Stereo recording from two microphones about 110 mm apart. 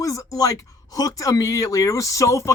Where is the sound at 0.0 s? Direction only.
30° left (ahead or behind).